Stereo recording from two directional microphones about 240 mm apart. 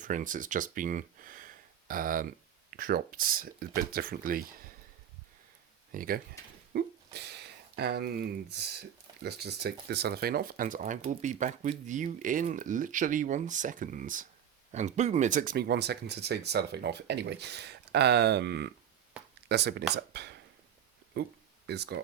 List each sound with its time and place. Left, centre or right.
0.0 s speech: right
5.9 s speech: right
6.7 s a sound: right
8.5 s speech: right